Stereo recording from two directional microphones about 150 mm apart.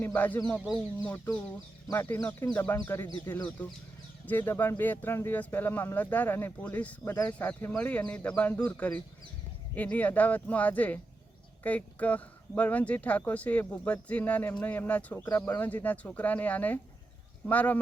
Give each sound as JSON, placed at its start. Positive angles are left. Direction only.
{"t": 0.0, "sound": "speech", "side_deg": 10}
{"t": 4.3, "sound": "speech", "side_deg": 15}